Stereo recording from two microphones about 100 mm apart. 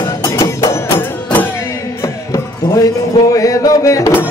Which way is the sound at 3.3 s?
35° left (ahead or behind).